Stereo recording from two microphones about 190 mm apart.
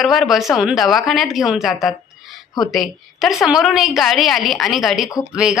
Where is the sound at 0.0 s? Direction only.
Centre (ahead or behind).